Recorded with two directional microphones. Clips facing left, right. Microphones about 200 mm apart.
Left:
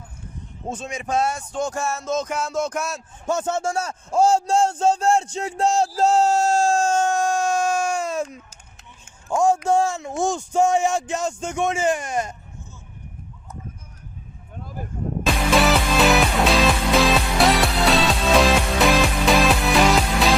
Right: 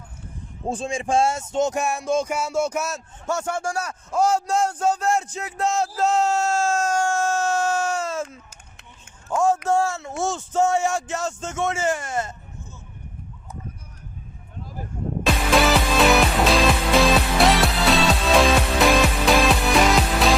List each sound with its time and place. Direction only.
0.7 s speech: 30° right (ahead or behind); by 3.0 s 5° right (ahead or behind)
3.2 s a man's voice: 20° left (ahead or behind)
15.2 s music: centre (ahead or behind)